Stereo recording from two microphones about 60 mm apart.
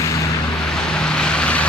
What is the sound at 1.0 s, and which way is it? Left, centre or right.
Vehicle, centre.